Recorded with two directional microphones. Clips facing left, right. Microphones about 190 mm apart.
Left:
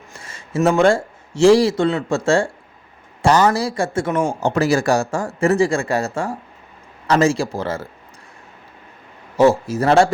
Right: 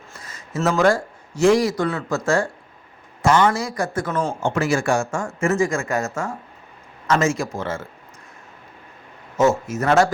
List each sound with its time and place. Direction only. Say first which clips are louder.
0.2 s speech: left 5 dB; 30° left (ahead or behind)
4.4 s speech: left 4 dB; 40° left (ahead or behind)
9.4 s speech: left 4 dB; 35° left (ahead or behind)